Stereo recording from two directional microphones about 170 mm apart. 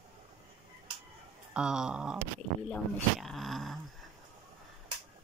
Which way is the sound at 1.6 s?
5° right (ahead or behind).